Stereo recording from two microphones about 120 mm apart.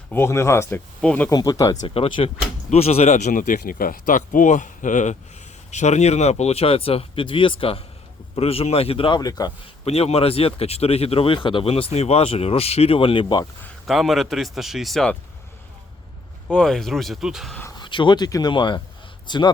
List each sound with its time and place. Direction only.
0.1 s speech: 20° left (ahead or behind)
1.3 s speech: 30° left (ahead or behind)
1.9 s speech: 45° left (ahead or behind)
2.6 s speech: 60° left (ahead or behind); by 5.1 s 90° left
5.7 s speech: 70° left (ahead or behind); by 9.5 s 35° left (ahead or behind)
9.8 s speech: 60° left (ahead or behind)
13.8 s speech: centre (ahead or behind)
16.5 s speech: 5° left (ahead or behind)
17.7 s speech: 40° left (ahead or behind)